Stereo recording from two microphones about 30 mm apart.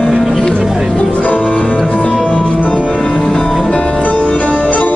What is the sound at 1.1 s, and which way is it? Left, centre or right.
Music, left.